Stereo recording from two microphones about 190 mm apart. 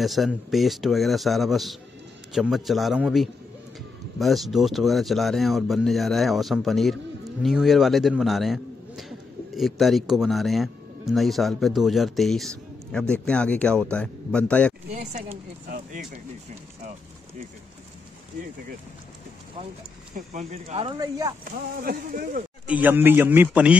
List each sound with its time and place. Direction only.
0.0 s speech: centre (ahead or behind)
14.9 s speech: 35° right (ahead or behind)
20.2 s speech: 40° right (ahead or behind)
20.8 s speech: 20° right (ahead or behind)
21.5 s speech: 50° right (ahead or behind)
22.7 s a man's voice: 10° right (ahead or behind)